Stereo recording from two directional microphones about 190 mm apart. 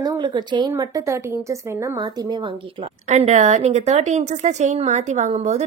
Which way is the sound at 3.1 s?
35° right (ahead or behind).